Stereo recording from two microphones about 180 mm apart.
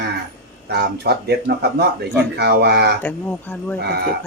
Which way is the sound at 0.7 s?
65° right (ahead or behind).